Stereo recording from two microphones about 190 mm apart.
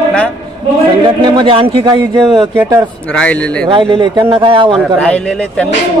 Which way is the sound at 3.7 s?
25° right (ahead or behind).